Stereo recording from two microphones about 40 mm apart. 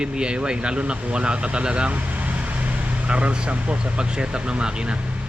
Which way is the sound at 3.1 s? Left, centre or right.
Right.